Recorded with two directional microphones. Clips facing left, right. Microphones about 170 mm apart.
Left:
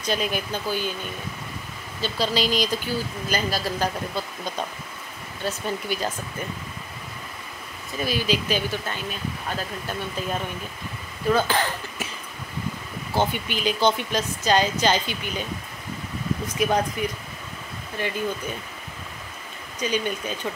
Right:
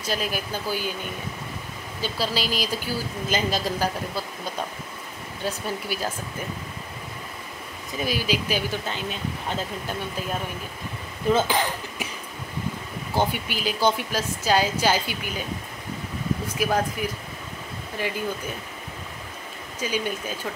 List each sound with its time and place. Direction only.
0.0 s speech: 5° right (ahead or behind)
2.0 s speech: 10° right (ahead or behind)
3.3 s speech: 20° right (ahead or behind)
3.8 s speech: 5° right (ahead or behind)
8.0 s speech: 10° right (ahead or behind)
11.2 s speech: 15° right (ahead or behind)
13.1 s speech: 10° right (ahead or behind)
16.5 s speech: 5° right (ahead or behind)
19.8 s speech: 5° right (ahead or behind)